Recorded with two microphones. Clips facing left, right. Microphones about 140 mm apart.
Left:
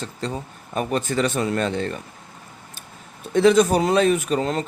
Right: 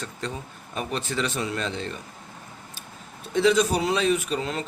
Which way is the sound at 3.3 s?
50° left (ahead or behind).